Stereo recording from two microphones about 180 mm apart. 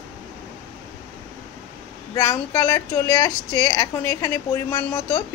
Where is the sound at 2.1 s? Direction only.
15° left (ahead or behind).